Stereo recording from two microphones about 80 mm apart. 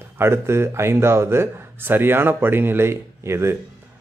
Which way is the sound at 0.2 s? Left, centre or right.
Right.